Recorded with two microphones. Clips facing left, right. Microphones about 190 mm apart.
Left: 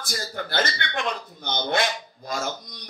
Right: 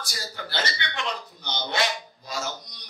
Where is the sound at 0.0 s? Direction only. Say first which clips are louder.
Left 5 dB; 55° left (ahead or behind).